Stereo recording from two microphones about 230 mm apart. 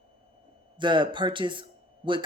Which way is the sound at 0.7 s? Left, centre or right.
Right.